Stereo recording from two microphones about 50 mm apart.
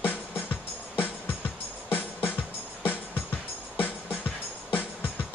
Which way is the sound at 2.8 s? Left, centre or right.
Left.